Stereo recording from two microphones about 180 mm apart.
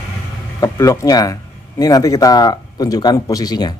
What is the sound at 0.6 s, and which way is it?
Speech, 15° left (ahead or behind).